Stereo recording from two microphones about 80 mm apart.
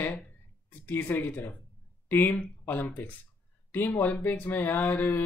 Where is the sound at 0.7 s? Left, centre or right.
Left.